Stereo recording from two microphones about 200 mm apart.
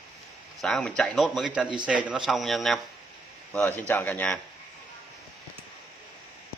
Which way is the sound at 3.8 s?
10° left (ahead or behind).